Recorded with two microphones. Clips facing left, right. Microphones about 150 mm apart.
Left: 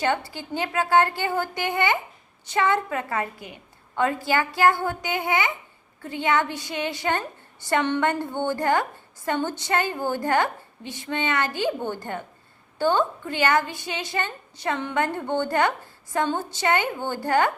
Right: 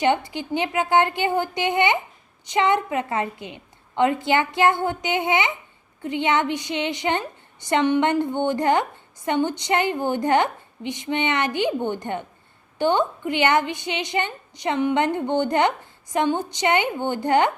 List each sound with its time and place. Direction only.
0.0 s a woman's voice: 20° right (ahead or behind)